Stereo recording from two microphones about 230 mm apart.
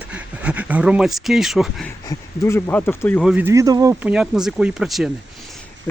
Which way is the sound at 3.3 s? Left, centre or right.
Centre.